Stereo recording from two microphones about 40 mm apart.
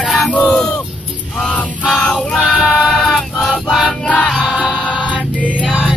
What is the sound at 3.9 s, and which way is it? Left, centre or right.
Music, left.